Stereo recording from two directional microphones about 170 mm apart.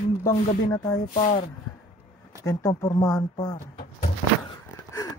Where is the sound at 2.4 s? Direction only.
20° left (ahead or behind).